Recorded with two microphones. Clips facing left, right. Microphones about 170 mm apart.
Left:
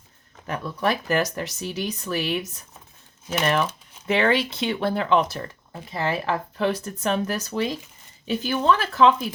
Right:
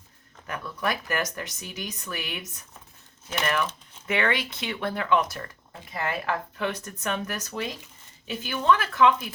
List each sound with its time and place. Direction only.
0.4 s speech: 30° left (ahead or behind)
3.4 s speech: 30° left (ahead or behind)